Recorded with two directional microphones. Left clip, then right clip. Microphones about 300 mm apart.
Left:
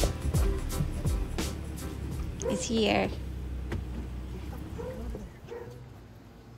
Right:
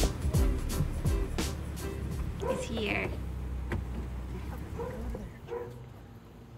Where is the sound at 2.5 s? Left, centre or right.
Centre.